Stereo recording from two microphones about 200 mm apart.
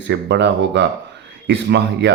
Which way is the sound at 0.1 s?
60° right (ahead or behind).